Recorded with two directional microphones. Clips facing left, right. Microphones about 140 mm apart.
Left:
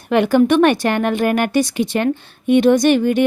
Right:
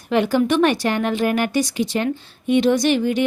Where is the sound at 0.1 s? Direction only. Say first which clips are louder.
Left 4 dB; 60° left (ahead or behind).